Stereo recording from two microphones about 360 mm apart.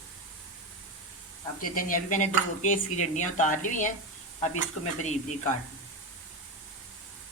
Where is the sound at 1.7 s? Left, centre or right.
Left.